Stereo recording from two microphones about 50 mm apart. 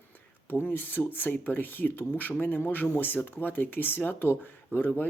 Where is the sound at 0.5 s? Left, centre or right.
Left.